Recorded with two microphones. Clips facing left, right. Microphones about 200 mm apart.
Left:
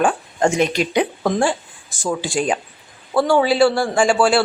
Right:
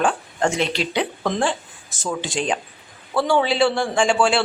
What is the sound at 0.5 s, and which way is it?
Speech, 45° left (ahead or behind).